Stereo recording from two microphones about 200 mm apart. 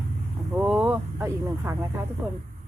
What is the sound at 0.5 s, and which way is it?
Speech, 5° right (ahead or behind).